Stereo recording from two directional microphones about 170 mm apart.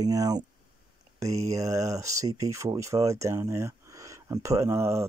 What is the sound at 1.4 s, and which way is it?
Speech, 20° right (ahead or behind).